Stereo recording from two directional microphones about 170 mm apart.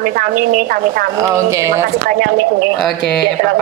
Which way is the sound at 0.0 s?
55° right (ahead or behind).